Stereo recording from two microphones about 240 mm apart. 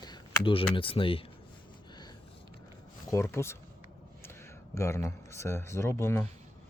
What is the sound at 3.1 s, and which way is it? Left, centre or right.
Speech, centre.